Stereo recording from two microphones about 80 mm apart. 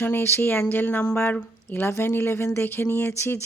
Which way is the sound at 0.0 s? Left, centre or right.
Left.